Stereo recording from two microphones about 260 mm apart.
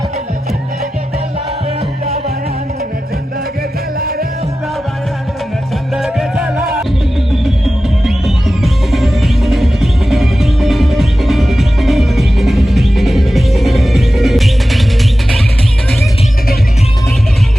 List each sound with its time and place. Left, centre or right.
3.9 s music: right
5.9 s music: centre